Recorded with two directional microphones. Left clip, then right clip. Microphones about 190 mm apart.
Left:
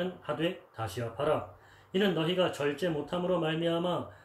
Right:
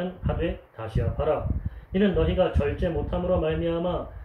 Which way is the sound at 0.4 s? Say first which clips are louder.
Right 2 dB; 55° left (ahead or behind).